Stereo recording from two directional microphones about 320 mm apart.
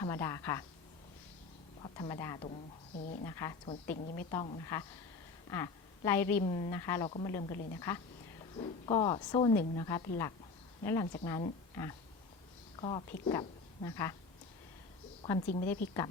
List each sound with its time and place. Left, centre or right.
0.0 s speech: centre
1.8 s a woman's voice: centre
3.0 s a woman's voice: left
3.2 s a woman's voice: centre
3.9 s a woman's voice: left
15.2 s a woman's voice: centre